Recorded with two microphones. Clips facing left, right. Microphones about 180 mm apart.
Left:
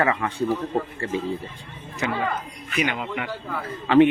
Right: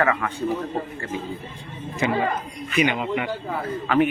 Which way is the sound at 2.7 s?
5° right (ahead or behind).